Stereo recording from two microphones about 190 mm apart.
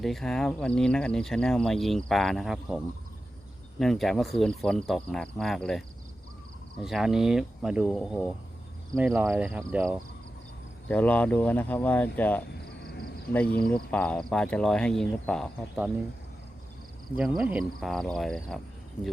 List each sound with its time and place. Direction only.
0.0 s speech: centre (ahead or behind)
6.8 s speech: centre (ahead or behind)
10.8 s speech: 5° left (ahead or behind)
12.8 s caw: 55° left (ahead or behind)
13.3 s speech: 5° left (ahead or behind)
17.2 s speech: 5° right (ahead or behind)